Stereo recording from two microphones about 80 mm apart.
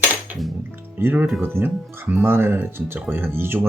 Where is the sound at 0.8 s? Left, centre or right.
Right.